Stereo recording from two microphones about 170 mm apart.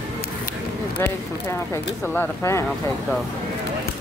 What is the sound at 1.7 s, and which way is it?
Speech, 10° left (ahead or behind).